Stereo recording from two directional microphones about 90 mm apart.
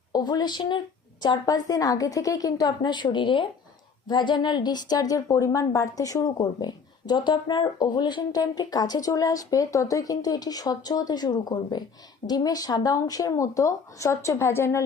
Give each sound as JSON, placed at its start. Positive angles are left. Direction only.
{"t": 0.1, "sound": "a woman's voice", "side_deg": 50}